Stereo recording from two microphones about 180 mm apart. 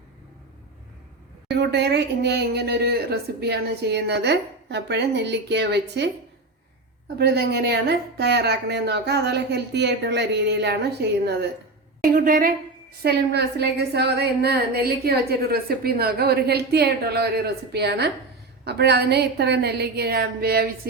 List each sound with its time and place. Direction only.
1.5 s speech: 70° right (ahead or behind)
7.2 s speech: 65° right (ahead or behind)
12.0 s a woman's voice: 50° right (ahead or behind)
13.0 s a woman's voice: 60° right (ahead or behind)